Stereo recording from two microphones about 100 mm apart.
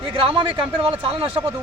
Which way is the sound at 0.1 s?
65° right (ahead or behind).